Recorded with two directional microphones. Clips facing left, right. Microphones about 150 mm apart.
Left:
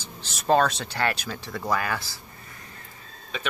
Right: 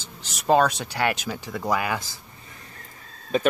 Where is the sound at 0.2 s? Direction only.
15° right (ahead or behind).